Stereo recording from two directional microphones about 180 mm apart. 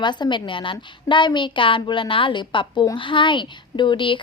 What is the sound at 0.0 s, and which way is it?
A woman's voice, 25° left (ahead or behind).